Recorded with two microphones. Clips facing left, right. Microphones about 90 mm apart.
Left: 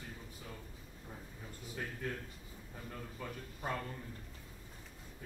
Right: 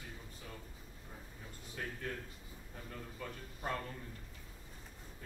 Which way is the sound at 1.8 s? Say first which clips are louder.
Left 1 dB; 5° left (ahead or behind).